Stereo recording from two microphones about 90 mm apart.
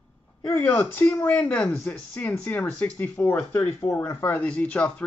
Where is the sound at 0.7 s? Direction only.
25° left (ahead or behind).